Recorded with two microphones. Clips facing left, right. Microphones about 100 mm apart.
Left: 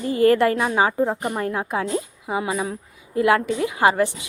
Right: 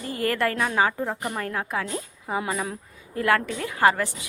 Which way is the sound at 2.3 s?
10° left (ahead or behind).